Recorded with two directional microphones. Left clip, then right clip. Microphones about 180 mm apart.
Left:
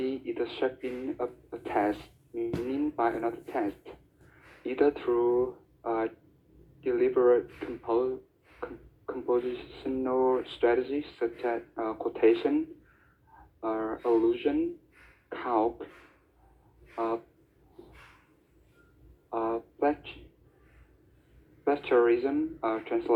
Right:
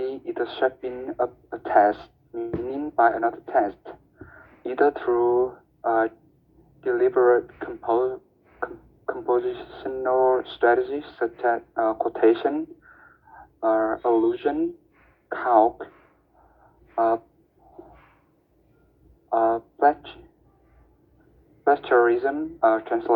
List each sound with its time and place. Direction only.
0.0 s a sound: 20° right (ahead or behind)
1.2 s speech: 25° right (ahead or behind)
1.7 s music: 20° right (ahead or behind)
4.6 s speech: 20° right (ahead or behind)
13.6 s a sound: 25° right (ahead or behind)
13.8 s speech: 30° right (ahead or behind)
16.9 s a sound: 25° right (ahead or behind)
19.3 s speech: 25° right (ahead or behind)
21.6 s speech: 20° right (ahead or behind)